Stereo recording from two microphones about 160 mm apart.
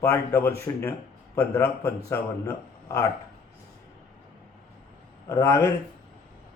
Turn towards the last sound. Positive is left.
turn(degrees=20)  # may be behind; listen again after turning